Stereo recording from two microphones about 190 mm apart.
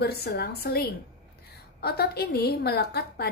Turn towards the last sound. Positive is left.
turn(degrees=55)  # may be behind; listen again after turning